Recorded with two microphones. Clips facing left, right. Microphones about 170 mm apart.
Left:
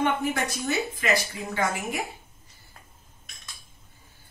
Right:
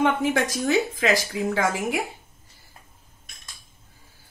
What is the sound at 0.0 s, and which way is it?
A woman's voice, 90° right.